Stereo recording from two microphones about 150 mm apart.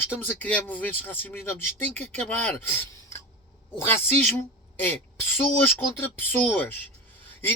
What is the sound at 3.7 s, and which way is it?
A woman's voice, 15° left (ahead or behind).